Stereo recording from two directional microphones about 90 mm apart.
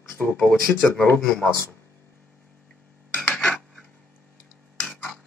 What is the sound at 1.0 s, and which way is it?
Speech, 20° left (ahead or behind).